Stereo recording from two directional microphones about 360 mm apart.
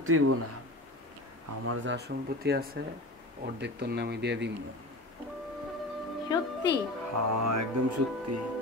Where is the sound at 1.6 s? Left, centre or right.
Right.